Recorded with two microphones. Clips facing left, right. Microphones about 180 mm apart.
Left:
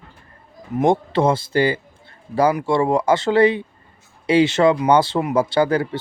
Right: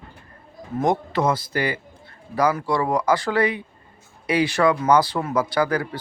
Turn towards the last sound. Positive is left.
turn(degrees=25)  # may be behind; listen again after turning